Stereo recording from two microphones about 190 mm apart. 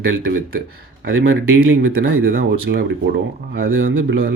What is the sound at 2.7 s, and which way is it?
Speech, 65° right (ahead or behind).